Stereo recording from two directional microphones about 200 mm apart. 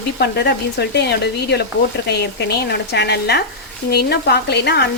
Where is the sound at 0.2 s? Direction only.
55° left (ahead or behind).